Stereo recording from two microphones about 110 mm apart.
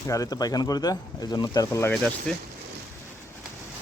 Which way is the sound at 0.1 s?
35° left (ahead or behind).